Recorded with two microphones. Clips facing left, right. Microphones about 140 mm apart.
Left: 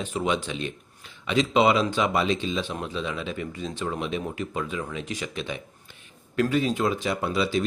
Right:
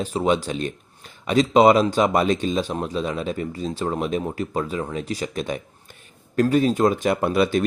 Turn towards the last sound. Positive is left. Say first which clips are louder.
# right 5 dB
turn(degrees=-55)  # may be behind; listen again after turning